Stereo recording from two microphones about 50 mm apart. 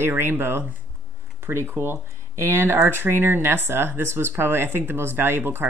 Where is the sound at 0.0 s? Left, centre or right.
Right.